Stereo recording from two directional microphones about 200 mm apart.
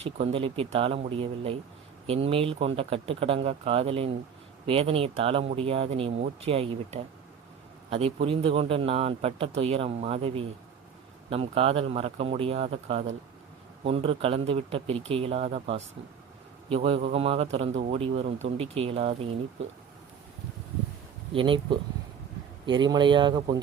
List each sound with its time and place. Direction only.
0.0 s a man's voice: 30° right (ahead or behind)
21.3 s a man's voice: 25° right (ahead or behind)